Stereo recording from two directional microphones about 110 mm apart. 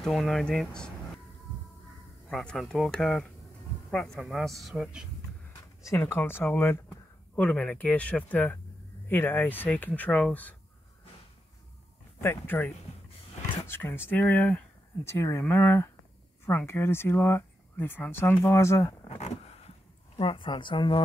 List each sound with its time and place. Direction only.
0.0 s speech: centre (ahead or behind)
2.2 s speech: 5° left (ahead or behind)
5.6 s speech: 30° left (ahead or behind); by 10.5 s 10° left (ahead or behind)
12.2 s speech: 20° left (ahead or behind)
13.7 s speech: 20° left (ahead or behind)
19.0 s a sound: 85° left
20.2 s speech: 50° left (ahead or behind)